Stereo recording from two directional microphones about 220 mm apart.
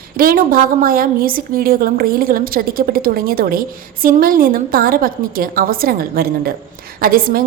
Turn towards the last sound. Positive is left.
turn(degrees=-40)  # may be behind; listen again after turning